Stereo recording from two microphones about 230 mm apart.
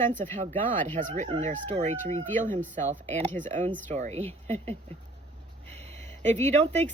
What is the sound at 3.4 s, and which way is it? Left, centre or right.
Speech, right.